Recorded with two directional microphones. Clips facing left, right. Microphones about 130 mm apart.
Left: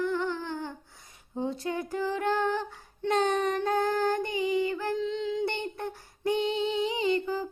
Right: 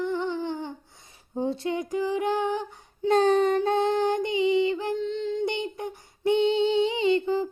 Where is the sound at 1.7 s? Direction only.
15° right (ahead or behind).